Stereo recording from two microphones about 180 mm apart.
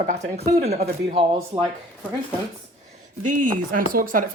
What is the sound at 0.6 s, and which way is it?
Speech, 35° right (ahead or behind).